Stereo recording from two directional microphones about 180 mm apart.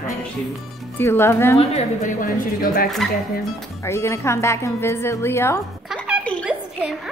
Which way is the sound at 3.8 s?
15° left (ahead or behind).